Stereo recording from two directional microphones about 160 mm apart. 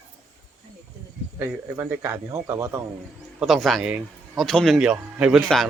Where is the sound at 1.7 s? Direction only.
15° right (ahead or behind).